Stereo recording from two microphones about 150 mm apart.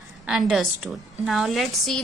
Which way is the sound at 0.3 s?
Centre (ahead or behind).